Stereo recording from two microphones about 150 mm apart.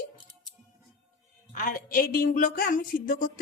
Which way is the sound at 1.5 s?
65° left (ahead or behind).